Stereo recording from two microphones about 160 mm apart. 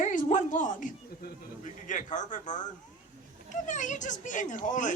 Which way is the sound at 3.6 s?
50° left (ahead or behind).